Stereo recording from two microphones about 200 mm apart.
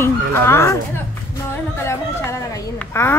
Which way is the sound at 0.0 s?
10° left (ahead or behind).